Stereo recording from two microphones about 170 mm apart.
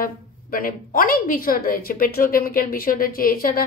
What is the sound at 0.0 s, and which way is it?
A woman's voice, 55° left (ahead or behind).